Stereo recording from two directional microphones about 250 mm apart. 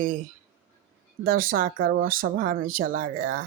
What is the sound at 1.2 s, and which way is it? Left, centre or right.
Speech, right.